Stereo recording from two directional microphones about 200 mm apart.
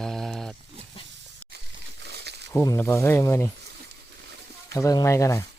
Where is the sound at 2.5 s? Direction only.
15° left (ahead or behind).